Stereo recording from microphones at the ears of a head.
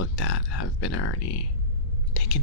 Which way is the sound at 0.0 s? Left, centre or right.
Left.